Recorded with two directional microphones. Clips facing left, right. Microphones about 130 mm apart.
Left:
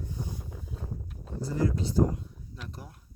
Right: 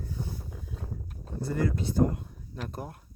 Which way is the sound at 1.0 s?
55° right (ahead or behind).